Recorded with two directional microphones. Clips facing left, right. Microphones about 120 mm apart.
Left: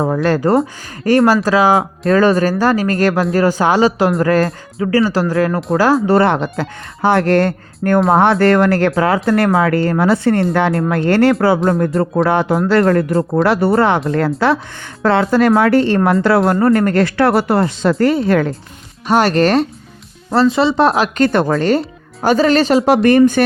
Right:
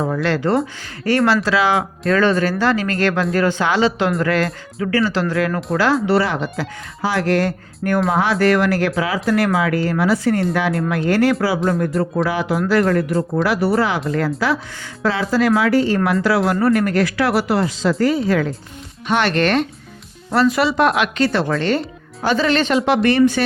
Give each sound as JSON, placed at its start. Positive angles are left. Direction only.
{"t": 0.0, "sound": "speech", "side_deg": 40}
{"t": 13.4, "sound": "speech", "side_deg": 60}
{"t": 16.4, "sound": "speech", "side_deg": 45}
{"t": 19.0, "sound": "speech", "side_deg": 40}
{"t": 20.3, "sound": "speech", "side_deg": 30}
{"t": 21.2, "sound": "speech", "side_deg": 50}